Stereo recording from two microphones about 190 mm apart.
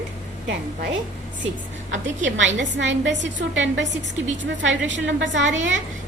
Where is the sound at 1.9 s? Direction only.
75° right (ahead or behind).